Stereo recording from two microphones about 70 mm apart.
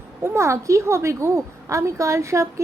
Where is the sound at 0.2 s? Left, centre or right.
Right.